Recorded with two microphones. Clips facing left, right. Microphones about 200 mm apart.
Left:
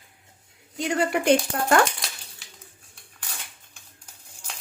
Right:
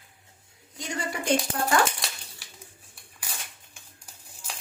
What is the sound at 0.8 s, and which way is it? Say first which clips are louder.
Speech: left 9 dB; 65° left (ahead or behind).